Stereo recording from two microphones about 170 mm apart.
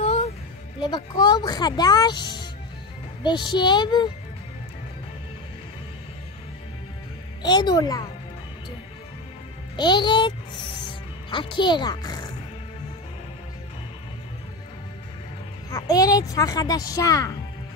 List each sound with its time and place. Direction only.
0.7 s speech: 25° left (ahead or behind)
7.4 s speech: 25° left (ahead or behind)
9.8 s speech: 25° left (ahead or behind)
15.7 s speech: 20° left (ahead or behind)